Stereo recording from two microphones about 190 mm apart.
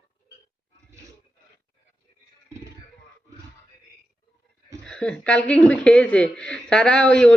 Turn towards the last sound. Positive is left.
turn(degrees=5)  # may be behind; listen again after turning